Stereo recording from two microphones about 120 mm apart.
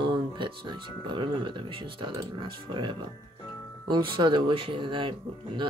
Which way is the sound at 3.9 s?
40° right (ahead or behind).